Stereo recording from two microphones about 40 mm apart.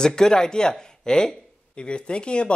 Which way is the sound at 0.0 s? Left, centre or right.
Centre.